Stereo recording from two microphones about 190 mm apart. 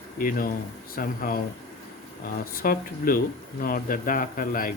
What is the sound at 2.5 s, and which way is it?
Speech, 50° left (ahead or behind).